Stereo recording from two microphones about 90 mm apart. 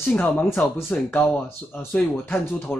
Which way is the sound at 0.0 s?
20° left (ahead or behind).